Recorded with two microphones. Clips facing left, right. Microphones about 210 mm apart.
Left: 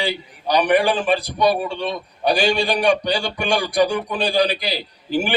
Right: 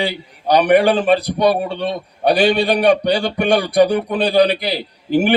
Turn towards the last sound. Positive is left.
turn(degrees=-55)  # may be behind; listen again after turning